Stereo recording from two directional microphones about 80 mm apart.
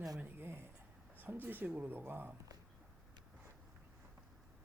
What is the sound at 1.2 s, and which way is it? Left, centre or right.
Speech, right.